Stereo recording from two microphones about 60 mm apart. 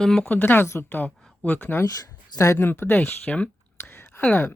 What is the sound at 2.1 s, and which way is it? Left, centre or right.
Speech, left.